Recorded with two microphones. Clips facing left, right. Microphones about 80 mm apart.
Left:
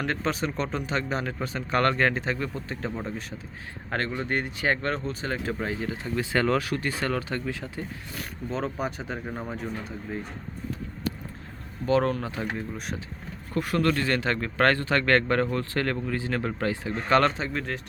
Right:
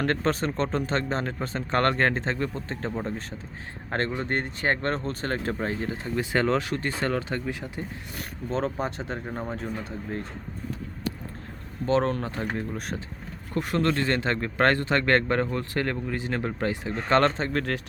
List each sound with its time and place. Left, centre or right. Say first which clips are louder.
0.0 s speech: right 3 dB; right
6.0 s speech: even; right
8.1 s speech: right 3 dB; right
9.2 s speech: right 1 dB; centre
11.9 s speech: even; right
13.5 s speech: even; right
17.5 s speech: right 4 dB; right